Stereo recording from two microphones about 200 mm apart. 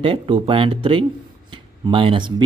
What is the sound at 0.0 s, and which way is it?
Speech, 25° right (ahead or behind).